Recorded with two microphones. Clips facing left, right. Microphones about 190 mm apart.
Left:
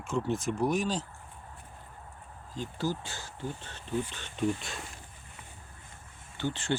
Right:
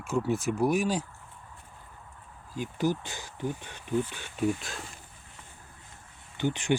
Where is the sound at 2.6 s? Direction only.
15° right (ahead or behind).